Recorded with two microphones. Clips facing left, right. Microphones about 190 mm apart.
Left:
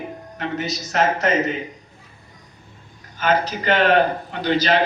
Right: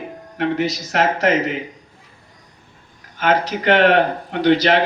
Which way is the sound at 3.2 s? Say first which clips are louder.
Right 3 dB; 70° right (ahead or behind).